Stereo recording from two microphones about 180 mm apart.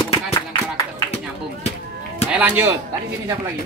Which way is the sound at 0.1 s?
20° left (ahead or behind).